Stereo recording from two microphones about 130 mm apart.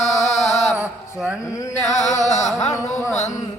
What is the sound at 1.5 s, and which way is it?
Chant, 25° left (ahead or behind).